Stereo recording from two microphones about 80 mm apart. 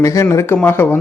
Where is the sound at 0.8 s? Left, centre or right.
Left.